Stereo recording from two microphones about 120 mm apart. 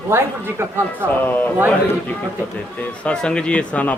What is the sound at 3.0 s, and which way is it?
Speech, 10° left (ahead or behind).